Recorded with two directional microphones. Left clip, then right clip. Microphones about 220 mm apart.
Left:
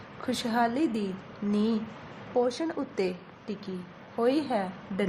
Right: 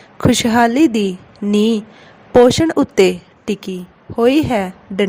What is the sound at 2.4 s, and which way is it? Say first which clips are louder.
A woman's voice: right 18 dB; 45° right (ahead or behind).